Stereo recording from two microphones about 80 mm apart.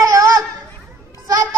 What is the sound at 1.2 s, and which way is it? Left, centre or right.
Music, right.